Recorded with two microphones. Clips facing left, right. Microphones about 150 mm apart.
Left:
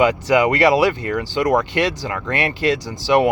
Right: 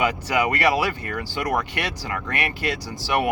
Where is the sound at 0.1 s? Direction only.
25° left (ahead or behind).